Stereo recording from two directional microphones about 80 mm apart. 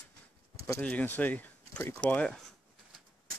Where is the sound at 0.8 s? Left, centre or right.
Centre.